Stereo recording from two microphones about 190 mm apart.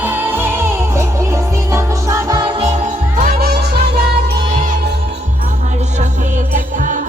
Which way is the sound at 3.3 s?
55° right (ahead or behind).